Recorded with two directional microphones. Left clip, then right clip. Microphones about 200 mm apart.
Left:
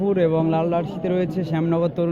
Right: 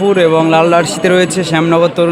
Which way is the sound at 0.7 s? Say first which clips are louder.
Right 13 dB; 30° right (ahead or behind).